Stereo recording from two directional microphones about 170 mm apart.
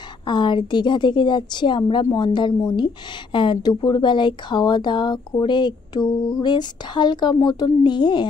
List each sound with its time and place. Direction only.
0.3 s a woman's voice: 25° left (ahead or behind)